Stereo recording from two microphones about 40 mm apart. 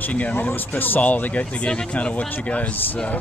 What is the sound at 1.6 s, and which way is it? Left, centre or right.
Speech, left.